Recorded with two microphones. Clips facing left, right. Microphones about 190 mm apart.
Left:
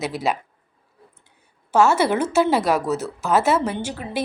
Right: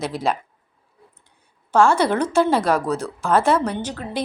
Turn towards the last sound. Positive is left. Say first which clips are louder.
# even
turn(degrees=10)  # may be behind; listen again after turning